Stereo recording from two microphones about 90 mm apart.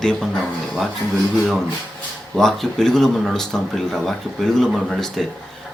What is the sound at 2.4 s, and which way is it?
Speech, 5° left (ahead or behind).